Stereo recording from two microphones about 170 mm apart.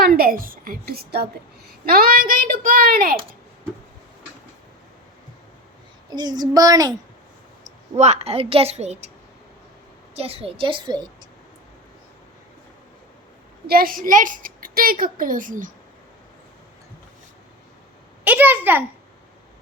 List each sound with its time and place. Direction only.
0.0 s a woman's voice: 65° right (ahead or behind)
6.1 s a woman's voice: 25° right (ahead or behind)
7.9 s a woman's voice: 40° right (ahead or behind)
10.2 s a woman's voice: 35° right (ahead or behind)
13.7 s a woman's voice: 60° right (ahead or behind)
18.3 s a child's voice: 10° right (ahead or behind)